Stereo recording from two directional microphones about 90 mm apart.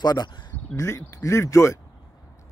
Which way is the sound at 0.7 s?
35° left (ahead or behind).